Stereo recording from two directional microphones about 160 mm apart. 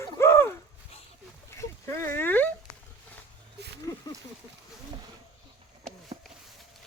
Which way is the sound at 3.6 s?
90° right.